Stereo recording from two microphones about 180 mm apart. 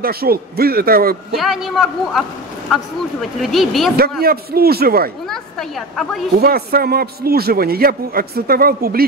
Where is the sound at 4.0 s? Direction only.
55° right (ahead or behind).